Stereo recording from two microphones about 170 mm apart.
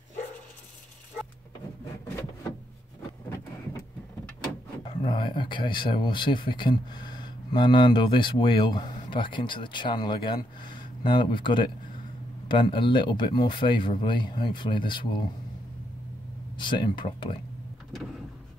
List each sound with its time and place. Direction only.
5.0 s speech: 25° left (ahead or behind)
16.5 s speech: 25° left (ahead or behind)